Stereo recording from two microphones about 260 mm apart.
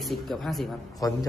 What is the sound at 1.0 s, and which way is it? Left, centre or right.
Speech, centre.